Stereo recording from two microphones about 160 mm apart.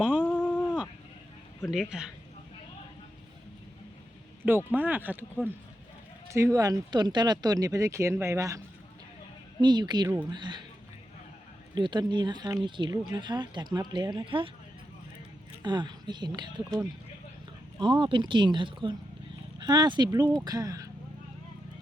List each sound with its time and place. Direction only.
0.0 s a sound: 5° right (ahead or behind)
0.3 s a sound: 10° left (ahead or behind)
1.6 s a woman's voice: 5° right (ahead or behind)
4.4 s speech: 10° right (ahead or behind); by 10.6 s 30° right (ahead or behind)
11.7 s speech: 30° right (ahead or behind)
15.6 s speech: 25° right (ahead or behind)
17.7 s speech: 30° right (ahead or behind)